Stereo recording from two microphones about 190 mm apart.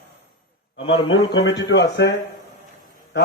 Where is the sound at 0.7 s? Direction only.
30° left (ahead or behind).